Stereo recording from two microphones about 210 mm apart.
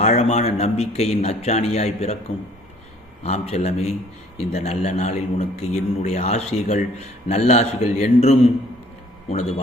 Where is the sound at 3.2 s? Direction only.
30° left (ahead or behind).